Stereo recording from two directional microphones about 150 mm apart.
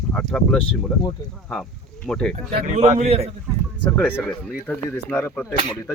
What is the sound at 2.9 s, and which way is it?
Speech, 45° right (ahead or behind).